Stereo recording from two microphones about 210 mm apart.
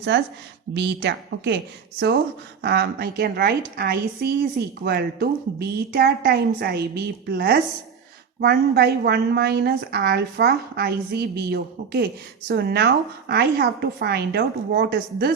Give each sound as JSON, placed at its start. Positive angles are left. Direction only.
{"t": 0.7, "sound": "a woman's voice", "side_deg": -55}
{"t": 2.6, "sound": "a woman's voice", "side_deg": -50}